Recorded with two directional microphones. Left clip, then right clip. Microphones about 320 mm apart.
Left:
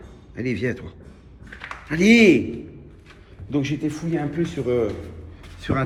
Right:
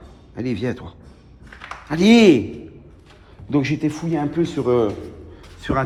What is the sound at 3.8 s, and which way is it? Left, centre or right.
Speech, right.